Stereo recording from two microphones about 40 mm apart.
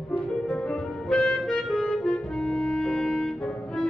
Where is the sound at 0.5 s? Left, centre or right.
Centre.